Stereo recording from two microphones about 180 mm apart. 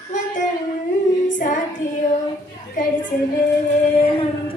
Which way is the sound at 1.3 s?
45° left (ahead or behind).